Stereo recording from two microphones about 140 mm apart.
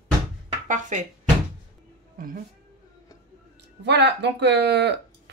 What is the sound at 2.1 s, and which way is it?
Speech, 90° right.